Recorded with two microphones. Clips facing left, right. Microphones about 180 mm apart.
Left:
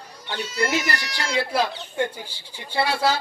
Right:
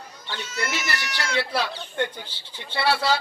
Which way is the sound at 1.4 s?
45° left (ahead or behind).